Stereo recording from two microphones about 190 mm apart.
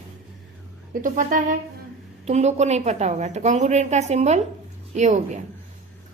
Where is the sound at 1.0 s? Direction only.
45° right (ahead or behind).